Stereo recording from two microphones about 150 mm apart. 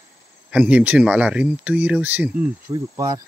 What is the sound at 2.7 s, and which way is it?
Speech, 30° right (ahead or behind).